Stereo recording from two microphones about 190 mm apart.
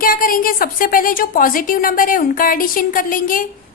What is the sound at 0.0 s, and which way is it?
A woman's voice, 50° left (ahead or behind).